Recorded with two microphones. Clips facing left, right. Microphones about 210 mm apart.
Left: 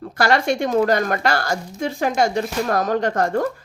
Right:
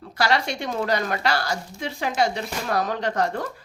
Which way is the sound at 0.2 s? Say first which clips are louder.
Left 5 dB; 50° left (ahead or behind).